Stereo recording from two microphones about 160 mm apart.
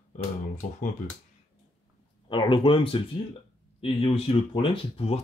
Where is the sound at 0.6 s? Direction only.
55° left (ahead or behind).